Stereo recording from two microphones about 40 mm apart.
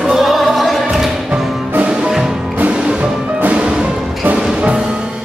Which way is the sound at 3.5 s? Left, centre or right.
Right.